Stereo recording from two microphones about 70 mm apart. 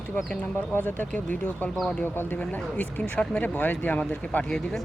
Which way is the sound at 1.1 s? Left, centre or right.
Left.